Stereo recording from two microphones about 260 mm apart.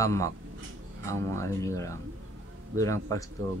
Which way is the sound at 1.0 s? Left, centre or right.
Right.